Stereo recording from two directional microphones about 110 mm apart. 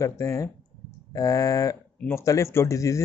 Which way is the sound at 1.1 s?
35° left (ahead or behind).